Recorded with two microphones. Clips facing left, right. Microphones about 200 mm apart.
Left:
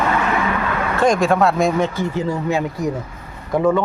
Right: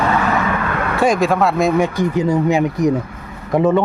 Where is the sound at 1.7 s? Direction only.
15° right (ahead or behind).